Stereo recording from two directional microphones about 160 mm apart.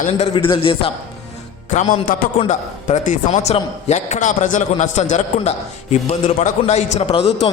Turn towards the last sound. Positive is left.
turn(degrees=40)  # may be behind; listen again after turning